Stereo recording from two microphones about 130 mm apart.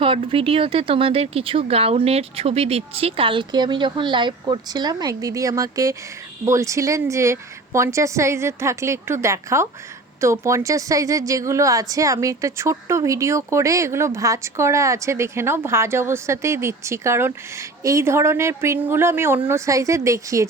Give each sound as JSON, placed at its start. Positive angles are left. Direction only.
{"t": 0.0, "sound": "a woman's voice", "side_deg": -45}